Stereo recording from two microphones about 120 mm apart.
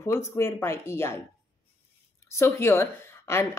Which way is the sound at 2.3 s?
20° left (ahead or behind).